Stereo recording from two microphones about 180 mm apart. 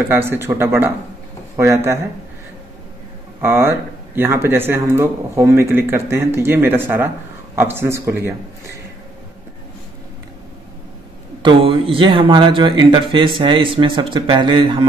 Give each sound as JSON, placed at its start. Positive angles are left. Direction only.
{"t": 0.1, "sound": "speech", "side_deg": -15}
{"t": 3.3, "sound": "speech", "side_deg": -15}
{"t": 11.4, "sound": "speech", "side_deg": -30}